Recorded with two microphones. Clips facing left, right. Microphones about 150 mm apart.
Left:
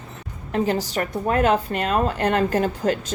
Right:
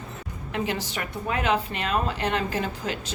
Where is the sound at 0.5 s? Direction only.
40° left (ahead or behind).